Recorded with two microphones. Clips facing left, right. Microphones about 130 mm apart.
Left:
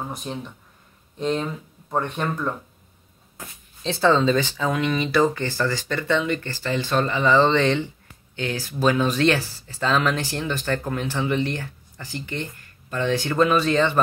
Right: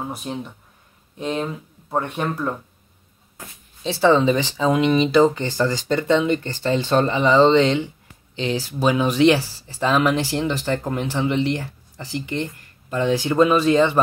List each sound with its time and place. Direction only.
0.1 s speech: 5° right (ahead or behind)
3.8 s speech: 10° right (ahead or behind)